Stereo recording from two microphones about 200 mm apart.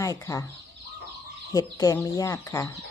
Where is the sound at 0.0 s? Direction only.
15° left (ahead or behind).